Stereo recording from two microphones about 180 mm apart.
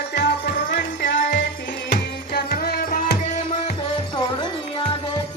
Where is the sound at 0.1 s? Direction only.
70° left (ahead or behind).